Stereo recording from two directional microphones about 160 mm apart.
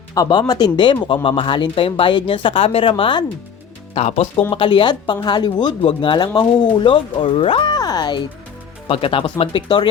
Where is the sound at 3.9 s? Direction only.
45° left (ahead or behind).